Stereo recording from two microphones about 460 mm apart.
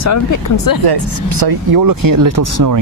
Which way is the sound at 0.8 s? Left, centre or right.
Right.